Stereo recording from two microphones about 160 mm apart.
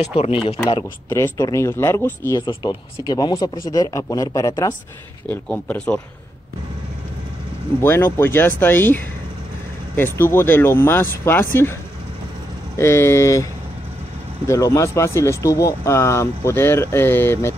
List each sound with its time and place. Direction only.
0.0 s speech: 40° left (ahead or behind)
1.1 s speech: 20° left (ahead or behind)
5.3 s speech: 10° left (ahead or behind)
7.8 s speech: 15° left (ahead or behind)
12.7 s speech: 15° left (ahead or behind)
14.5 s speech: 20° left (ahead or behind)